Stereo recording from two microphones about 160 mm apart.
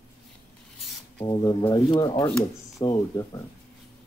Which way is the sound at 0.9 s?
Centre (ahead or behind).